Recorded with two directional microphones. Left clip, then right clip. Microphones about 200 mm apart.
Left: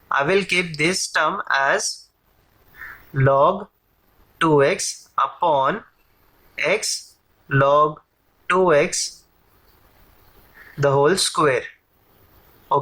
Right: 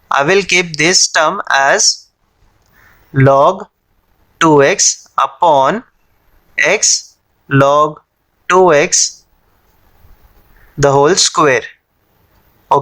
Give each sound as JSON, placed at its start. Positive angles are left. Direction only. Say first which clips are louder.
{"t": 0.1, "sound": "speech", "louder": "right 8 dB", "side_deg": -45}
{"t": 3.1, "sound": "speech", "louder": "right 8 dB", "side_deg": -45}
{"t": 10.8, "sound": "speech", "louder": "right 8 dB", "side_deg": -45}